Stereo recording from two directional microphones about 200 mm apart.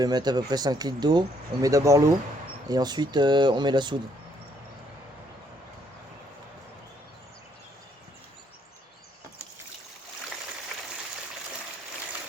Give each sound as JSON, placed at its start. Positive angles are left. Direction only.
{"t": 0.0, "sound": "speech", "side_deg": -20}